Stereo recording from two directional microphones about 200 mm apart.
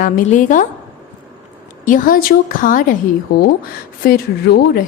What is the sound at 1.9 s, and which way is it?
Speech, 45° left (ahead or behind).